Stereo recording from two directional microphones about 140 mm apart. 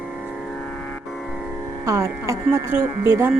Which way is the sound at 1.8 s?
20° right (ahead or behind).